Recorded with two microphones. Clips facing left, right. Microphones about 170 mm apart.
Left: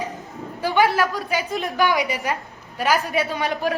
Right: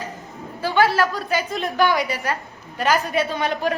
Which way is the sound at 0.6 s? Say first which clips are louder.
Even; 15° left (ahead or behind).